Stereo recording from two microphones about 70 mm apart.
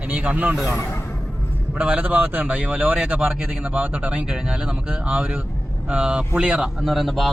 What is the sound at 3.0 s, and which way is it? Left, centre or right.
Speech, centre.